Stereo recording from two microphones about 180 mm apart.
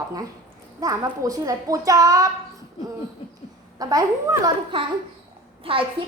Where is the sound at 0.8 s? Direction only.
20° right (ahead or behind).